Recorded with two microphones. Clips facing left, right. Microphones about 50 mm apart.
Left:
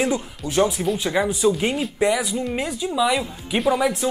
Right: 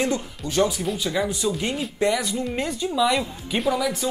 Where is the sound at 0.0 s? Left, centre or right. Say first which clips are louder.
Left 2 dB; centre.